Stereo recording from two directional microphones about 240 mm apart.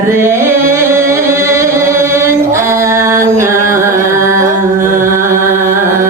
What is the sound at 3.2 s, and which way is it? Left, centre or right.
Music, centre.